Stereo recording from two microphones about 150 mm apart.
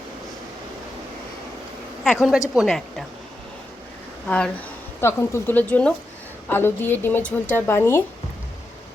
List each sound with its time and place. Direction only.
2.0 s a woman's voice: centre (ahead or behind)
4.3 s speech: 5° left (ahead or behind)